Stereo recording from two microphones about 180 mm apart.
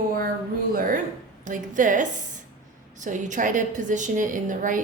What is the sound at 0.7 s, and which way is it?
A woman's voice, 50° right (ahead or behind).